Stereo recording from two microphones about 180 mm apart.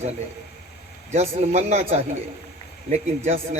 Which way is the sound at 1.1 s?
40° right (ahead or behind).